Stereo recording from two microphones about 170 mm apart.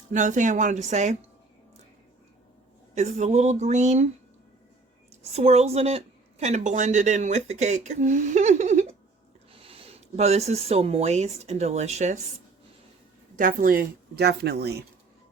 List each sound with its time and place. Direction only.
0.1 s speech: 45° right (ahead or behind)
2.9 s speech: 45° right (ahead or behind)
5.2 s speech: 40° right (ahead or behind)
13.3 s speech: 50° right (ahead or behind); by 14.8 s 70° right (ahead or behind)